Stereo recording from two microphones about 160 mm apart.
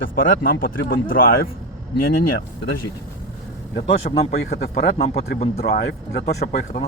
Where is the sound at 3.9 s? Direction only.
40° left (ahead or behind).